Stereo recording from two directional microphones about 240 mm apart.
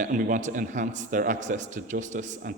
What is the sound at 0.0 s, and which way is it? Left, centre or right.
A man's voice, right.